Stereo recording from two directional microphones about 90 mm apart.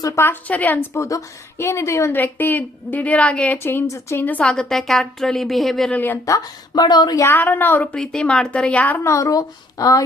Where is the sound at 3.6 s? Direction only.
25° left (ahead or behind); by 5.9 s centre (ahead or behind).